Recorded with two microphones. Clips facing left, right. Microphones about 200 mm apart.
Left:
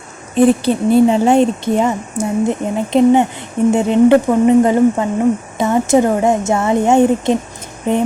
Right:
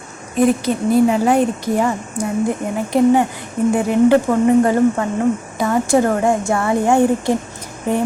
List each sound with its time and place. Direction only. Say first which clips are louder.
0.3 s speech: left 4 dB; 30° left (ahead or behind)